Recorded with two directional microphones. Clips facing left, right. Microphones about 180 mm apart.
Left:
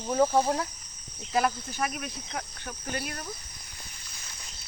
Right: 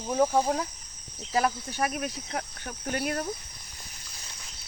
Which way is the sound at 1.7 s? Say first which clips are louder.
Right 3 dB; 40° right (ahead or behind).